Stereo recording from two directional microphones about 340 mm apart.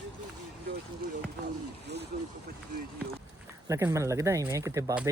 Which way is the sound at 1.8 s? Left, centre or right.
Right.